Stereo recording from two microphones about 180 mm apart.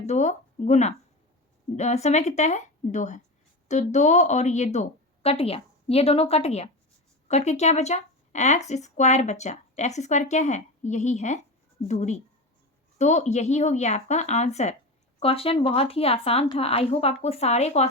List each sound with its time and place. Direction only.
0.0 s speech: 40° left (ahead or behind)